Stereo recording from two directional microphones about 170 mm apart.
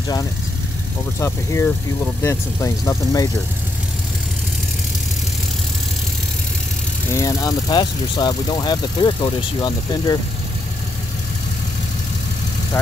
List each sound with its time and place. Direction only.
1.2 s speech: 15° left (ahead or behind)
7.1 s speech: 20° left (ahead or behind)
12.7 s speech: 15° left (ahead or behind)